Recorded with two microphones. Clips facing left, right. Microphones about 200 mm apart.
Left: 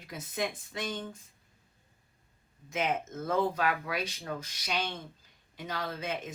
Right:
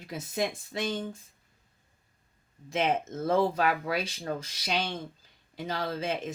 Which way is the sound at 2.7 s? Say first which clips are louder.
Right 4 dB; 30° right (ahead or behind).